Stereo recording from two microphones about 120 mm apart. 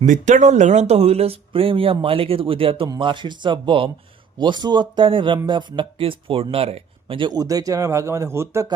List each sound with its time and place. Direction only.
0.0 s speech: 90° right; by 7.3 s 55° right (ahead or behind)
7.3 s a man's voice: 30° right (ahead or behind)